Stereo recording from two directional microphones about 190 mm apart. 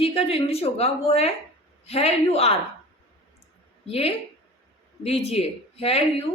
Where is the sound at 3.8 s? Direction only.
30° left (ahead or behind).